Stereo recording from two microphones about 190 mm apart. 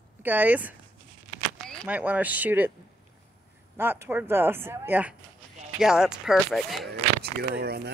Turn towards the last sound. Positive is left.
turn(degrees=-55)  # may be behind; listen again after turning